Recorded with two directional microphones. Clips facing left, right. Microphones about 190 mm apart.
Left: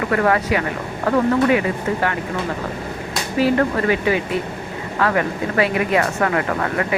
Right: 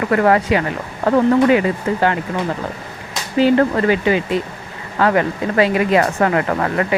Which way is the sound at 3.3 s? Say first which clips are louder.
Right 4 dB; 25° right (ahead or behind).